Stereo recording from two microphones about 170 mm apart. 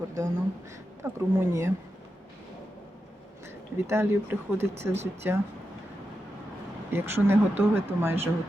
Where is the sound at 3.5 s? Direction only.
15° right (ahead or behind).